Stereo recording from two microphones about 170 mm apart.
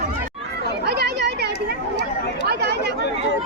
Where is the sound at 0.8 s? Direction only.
75° right (ahead or behind).